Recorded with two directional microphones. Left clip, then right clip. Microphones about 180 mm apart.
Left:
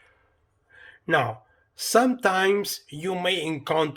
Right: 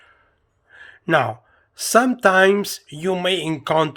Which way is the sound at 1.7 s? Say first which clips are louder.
Right 4 dB; 35° right (ahead or behind).